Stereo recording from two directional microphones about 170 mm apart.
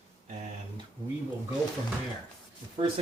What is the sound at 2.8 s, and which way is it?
Speech, 35° right (ahead or behind).